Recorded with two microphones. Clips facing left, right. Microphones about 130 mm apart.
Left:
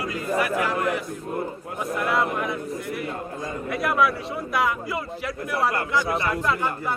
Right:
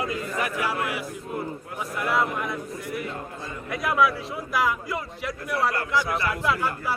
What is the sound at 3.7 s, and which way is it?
A man's voice, centre (ahead or behind).